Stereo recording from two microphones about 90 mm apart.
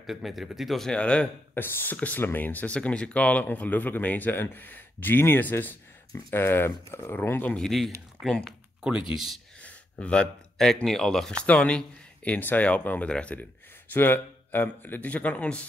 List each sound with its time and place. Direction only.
0.0 s a man's voice: centre (ahead or behind)
1.5 s speech: 25° left (ahead or behind)
7.5 s a man's voice: 5° left (ahead or behind)
9.1 s a man's voice: 5° right (ahead or behind)
9.6 s speech: 15° left (ahead or behind)